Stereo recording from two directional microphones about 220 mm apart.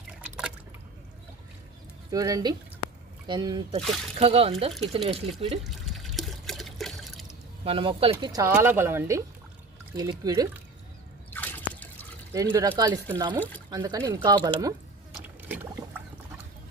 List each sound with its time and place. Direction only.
2.0 s speech: 15° right (ahead or behind)
3.8 s speech: centre (ahead or behind)
4.2 s speech: 25° right (ahead or behind)
5.6 s water: centre (ahead or behind)
7.6 s speech: 25° right (ahead or behind)
11.3 s drip: 5° left (ahead or behind)
12.3 s speech: 15° right (ahead or behind)
15.1 s a sound: 10° right (ahead or behind)